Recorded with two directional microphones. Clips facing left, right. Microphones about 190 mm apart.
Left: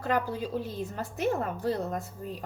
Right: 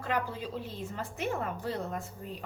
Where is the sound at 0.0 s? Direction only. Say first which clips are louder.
Left 4 dB; 45° left (ahead or behind).